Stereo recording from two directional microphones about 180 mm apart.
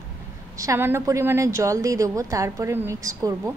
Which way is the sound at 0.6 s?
15° right (ahead or behind).